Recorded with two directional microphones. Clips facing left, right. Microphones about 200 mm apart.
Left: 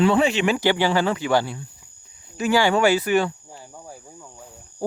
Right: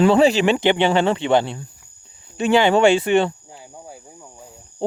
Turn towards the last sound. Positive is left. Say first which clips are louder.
# right 3 dB
turn(degrees=-25)  # may be behind; listen again after turning